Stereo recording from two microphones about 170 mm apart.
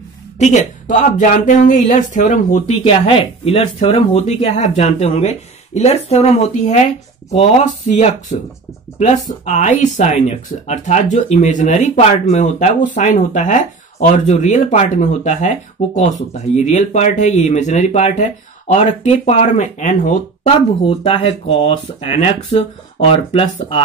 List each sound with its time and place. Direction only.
0.4 s speech: 45° left (ahead or behind)
20.8 s speech: 30° left (ahead or behind)